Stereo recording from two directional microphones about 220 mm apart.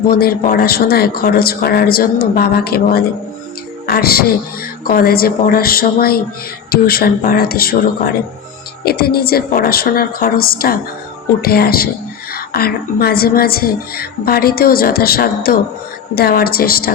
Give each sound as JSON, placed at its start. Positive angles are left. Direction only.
{"t": 0.1, "sound": "a woman's voice", "side_deg": 45}